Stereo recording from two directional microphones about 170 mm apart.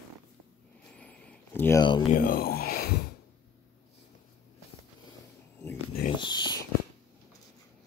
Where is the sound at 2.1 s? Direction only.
55° left (ahead or behind).